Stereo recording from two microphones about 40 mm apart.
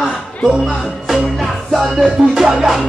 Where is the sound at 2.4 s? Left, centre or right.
Centre.